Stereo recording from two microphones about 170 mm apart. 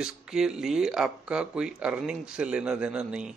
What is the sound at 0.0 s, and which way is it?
Speech, 5° right (ahead or behind).